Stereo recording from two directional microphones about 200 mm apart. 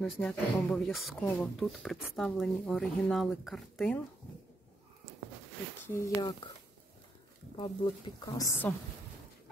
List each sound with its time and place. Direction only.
0.0 s speech: 5° left (ahead or behind)
5.8 s speech: 15° left (ahead or behind)
7.5 s speech: 20° left (ahead or behind)